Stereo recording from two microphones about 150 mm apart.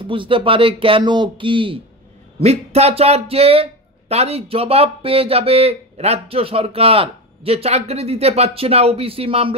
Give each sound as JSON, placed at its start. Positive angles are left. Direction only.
{"t": 0.0, "sound": "speech", "side_deg": -35}